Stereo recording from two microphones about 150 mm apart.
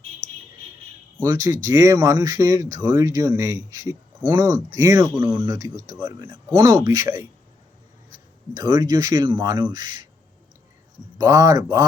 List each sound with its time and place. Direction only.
0.2 s a sound: 60° right (ahead or behind)
1.2 s speech: 20° right (ahead or behind)
8.5 s speech: 25° right (ahead or behind)
11.2 s speech: 20° right (ahead or behind)